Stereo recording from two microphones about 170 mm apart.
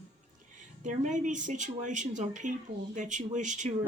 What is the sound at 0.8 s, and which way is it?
Speech, 45° right (ahead or behind).